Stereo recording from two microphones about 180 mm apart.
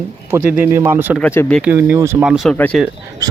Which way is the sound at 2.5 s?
10° left (ahead or behind).